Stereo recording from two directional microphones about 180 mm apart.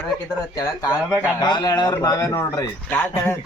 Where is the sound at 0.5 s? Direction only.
20° left (ahead or behind).